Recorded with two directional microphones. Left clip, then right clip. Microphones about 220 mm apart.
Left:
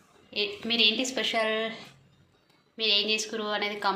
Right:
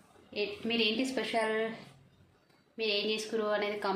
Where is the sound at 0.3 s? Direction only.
Centre (ahead or behind).